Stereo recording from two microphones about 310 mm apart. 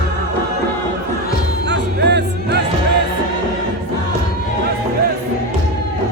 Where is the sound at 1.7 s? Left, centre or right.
Right.